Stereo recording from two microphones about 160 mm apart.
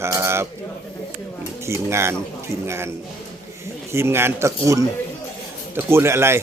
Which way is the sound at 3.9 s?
15° right (ahead or behind).